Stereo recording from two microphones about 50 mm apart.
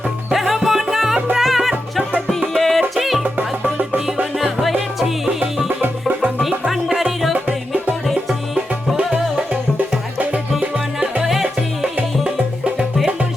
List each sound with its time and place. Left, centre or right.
0.3 s music: centre
3.2 s music: right
4.4 s music: centre
5.8 s music: right
6.7 s music: centre
10.6 s music: right
11.2 s music: centre